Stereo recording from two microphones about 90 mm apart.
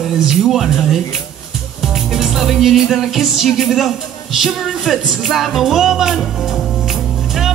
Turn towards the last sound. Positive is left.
turn(degrees=-5)  # may be behind; listen again after turning